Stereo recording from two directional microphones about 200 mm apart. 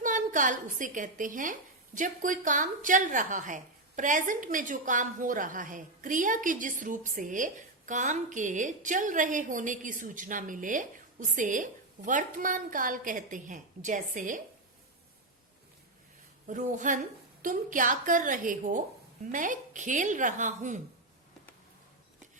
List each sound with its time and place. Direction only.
0.0 s a woman's voice: 40° right (ahead or behind)
16.5 s a woman's voice: 40° right (ahead or behind)